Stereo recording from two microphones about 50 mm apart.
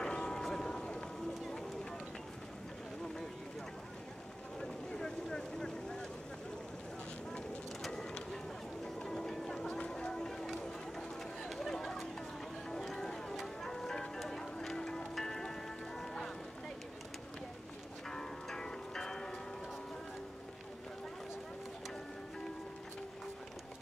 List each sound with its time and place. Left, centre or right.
0.0 s a sound: centre
4.6 s vehicle: centre
7.8 s vehicle: centre
8.8 s music: centre
9.7 s run: centre
13.6 s music: centre
18.1 s music: centre